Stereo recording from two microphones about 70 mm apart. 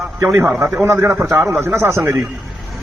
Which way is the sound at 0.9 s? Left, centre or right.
Right.